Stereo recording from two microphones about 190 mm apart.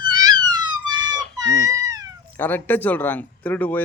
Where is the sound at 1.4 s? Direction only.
15° right (ahead or behind).